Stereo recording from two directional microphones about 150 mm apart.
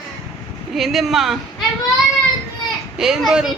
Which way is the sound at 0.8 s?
Centre (ahead or behind).